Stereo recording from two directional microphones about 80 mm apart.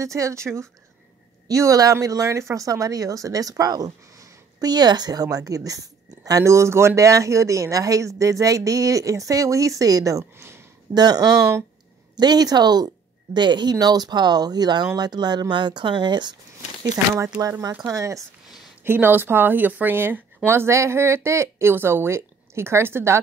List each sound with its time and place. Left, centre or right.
0.0 s speech: right
10.3 s speech: right
11.0 s speech: right
16.8 s speech: right
18.9 s speech: right